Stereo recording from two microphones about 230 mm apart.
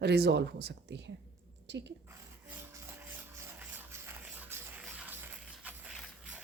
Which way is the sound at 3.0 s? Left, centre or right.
Centre.